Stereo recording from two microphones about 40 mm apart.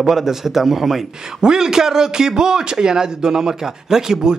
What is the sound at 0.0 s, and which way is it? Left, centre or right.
A man's voice, centre.